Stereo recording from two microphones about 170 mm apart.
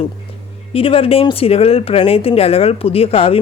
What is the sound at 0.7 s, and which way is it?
A woman's voice, 35° left (ahead or behind).